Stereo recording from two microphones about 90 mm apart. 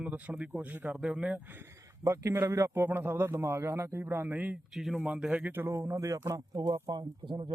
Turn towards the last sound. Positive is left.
turn(degrees=-65)  # may be behind; listen again after turning